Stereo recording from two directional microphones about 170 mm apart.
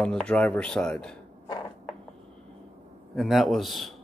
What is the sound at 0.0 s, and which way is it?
Speech, 5° left (ahead or behind).